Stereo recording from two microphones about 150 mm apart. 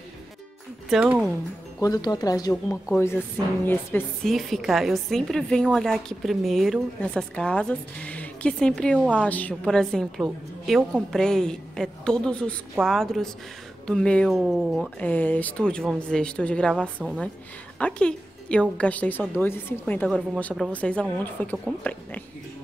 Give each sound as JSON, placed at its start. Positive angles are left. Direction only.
{"t": 0.8, "sound": "a woman's voice", "side_deg": -5}
{"t": 1.8, "sound": "speech", "side_deg": 25}
{"t": 2.5, "sound": "speech", "side_deg": 5}
{"t": 4.2, "sound": "a woman's voice", "side_deg": 0}
{"t": 17.0, "sound": "a woman's voice", "side_deg": -5}
{"t": 17.7, "sound": "speech", "side_deg": 10}